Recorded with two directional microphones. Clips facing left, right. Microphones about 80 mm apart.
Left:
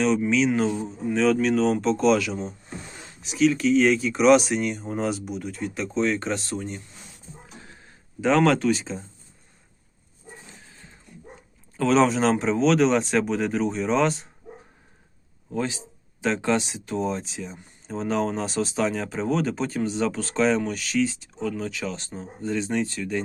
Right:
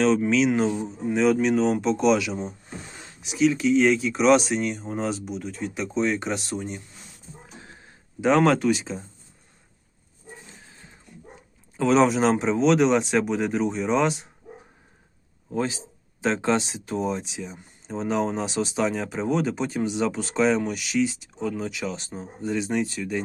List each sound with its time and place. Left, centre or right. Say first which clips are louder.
0.3 s speech: right 1 dB; right
7.6 s a sound: right 1 dB; right
11.8 s speech: right 1 dB; centre
15.5 s speech: right 1 dB; right
17.0 s speech: even; centre
21.4 s speech: even; right
21.7 s speech: even; centre